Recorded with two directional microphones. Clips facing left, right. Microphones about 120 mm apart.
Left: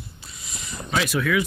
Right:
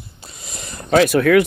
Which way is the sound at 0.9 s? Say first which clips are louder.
Right 10 dB; 55° right (ahead or behind).